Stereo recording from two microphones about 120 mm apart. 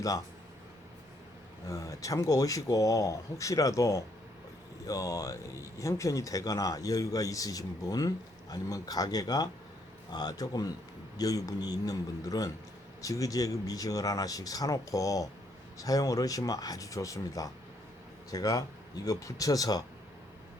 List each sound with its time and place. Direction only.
1.6 s a man's voice: 25° left (ahead or behind)